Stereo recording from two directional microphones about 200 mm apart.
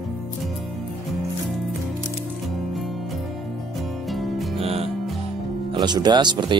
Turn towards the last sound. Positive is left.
turn(degrees=-20)  # may be behind; listen again after turning